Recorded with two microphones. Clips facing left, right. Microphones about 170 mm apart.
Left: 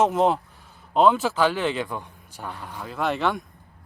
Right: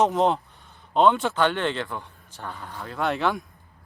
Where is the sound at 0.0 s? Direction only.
Centre (ahead or behind).